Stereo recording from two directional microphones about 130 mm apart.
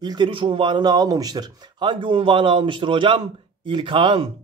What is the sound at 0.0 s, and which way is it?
A man's voice, 35° right (ahead or behind).